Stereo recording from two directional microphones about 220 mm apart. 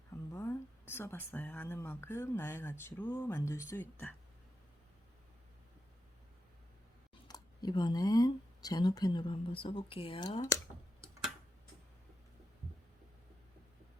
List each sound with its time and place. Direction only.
0.3 s speech: 10° left (ahead or behind)
7.3 s speech: 20° left (ahead or behind)